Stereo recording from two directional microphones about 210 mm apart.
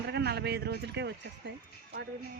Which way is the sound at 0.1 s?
50° right (ahead or behind).